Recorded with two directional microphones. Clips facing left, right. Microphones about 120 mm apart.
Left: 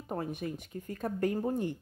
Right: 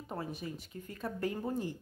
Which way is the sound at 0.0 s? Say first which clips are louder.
Left 4 dB; 50° left (ahead or behind).